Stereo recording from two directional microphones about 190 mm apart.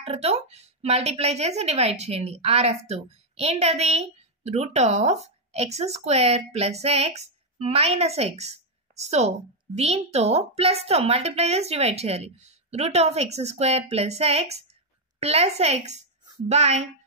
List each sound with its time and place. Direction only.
0.0 s a woman's voice: 35° right (ahead or behind)